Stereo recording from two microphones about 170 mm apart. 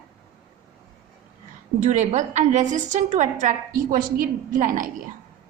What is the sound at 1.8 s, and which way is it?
A woman's voice, 45° right (ahead or behind).